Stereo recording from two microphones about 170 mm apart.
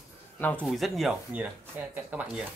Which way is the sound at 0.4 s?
10° left (ahead or behind).